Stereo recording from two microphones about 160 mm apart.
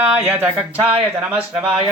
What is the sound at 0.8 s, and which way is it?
Speech, 35° right (ahead or behind).